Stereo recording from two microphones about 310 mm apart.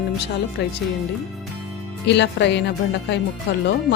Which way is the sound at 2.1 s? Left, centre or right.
Left.